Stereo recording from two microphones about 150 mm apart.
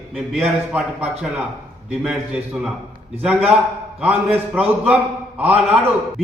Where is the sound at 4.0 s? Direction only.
10° right (ahead or behind).